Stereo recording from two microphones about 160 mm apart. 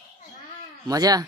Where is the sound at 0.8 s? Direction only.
25° right (ahead or behind).